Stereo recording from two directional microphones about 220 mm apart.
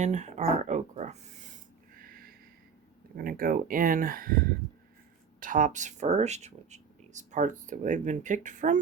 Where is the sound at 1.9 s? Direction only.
40° right (ahead or behind).